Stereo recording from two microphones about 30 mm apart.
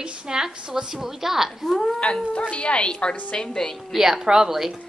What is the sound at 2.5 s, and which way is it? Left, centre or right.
A woman's voice, left.